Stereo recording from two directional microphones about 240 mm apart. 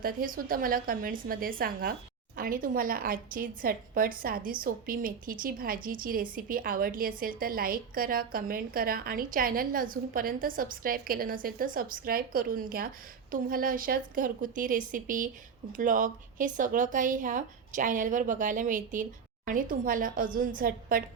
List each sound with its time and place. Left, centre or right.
0.0 s a woman's voice: right